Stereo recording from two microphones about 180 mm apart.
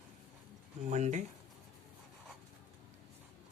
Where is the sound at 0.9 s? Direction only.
40° right (ahead or behind).